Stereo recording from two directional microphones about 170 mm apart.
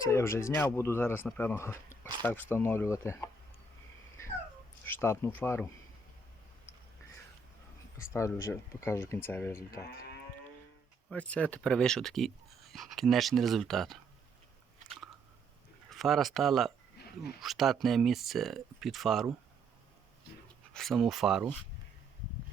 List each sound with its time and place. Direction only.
0.0 s speech: 15° left (ahead or behind)
4.9 s speech: 15° left (ahead or behind)
7.9 s speech: 15° left (ahead or behind)
11.1 s speech: 5° left (ahead or behind)
15.9 s speech: centre (ahead or behind)
20.7 s speech: centre (ahead or behind)